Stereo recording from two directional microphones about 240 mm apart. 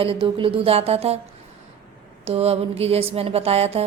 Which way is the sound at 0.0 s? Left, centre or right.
Right.